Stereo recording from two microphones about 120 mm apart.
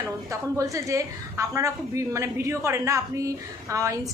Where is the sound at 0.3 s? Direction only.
25° right (ahead or behind).